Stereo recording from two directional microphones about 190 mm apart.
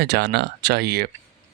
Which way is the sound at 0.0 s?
60° right (ahead or behind).